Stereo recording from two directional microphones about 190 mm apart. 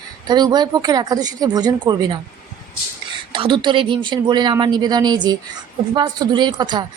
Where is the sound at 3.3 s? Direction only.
25° right (ahead or behind).